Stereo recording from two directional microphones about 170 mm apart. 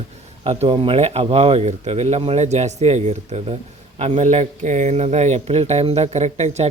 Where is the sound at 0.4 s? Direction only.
30° right (ahead or behind).